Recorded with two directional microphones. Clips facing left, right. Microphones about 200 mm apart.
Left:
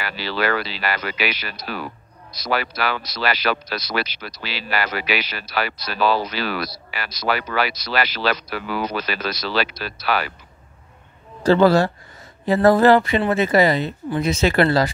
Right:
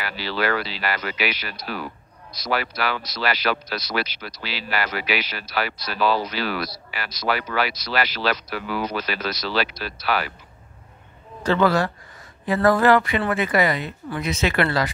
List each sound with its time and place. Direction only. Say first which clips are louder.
0.0 s speech: left 2 dB; 80° left
2.5 s speech: left 2 dB; 80° left
11.4 s speech: left 5 dB; 30° left (ahead or behind)